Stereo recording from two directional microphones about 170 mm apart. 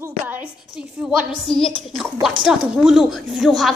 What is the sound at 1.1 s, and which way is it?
A woman's voice, centre (ahead or behind).